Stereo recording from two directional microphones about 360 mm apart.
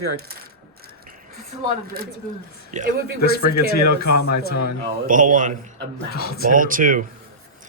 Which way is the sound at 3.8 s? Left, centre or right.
Left.